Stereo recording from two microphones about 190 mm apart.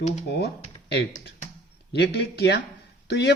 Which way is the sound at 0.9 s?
65° left (ahead or behind).